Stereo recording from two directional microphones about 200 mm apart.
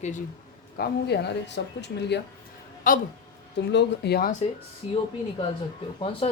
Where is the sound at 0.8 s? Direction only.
55° left (ahead or behind).